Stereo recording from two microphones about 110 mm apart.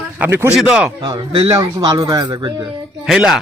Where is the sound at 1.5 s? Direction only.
35° right (ahead or behind).